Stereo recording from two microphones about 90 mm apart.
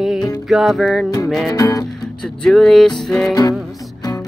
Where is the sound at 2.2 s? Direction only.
5° left (ahead or behind).